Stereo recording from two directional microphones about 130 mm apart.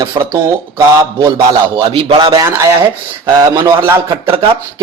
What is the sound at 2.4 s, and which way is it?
Speech, 20° right (ahead or behind).